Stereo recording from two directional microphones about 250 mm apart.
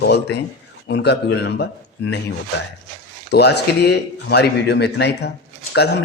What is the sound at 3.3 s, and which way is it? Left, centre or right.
A man's voice, left.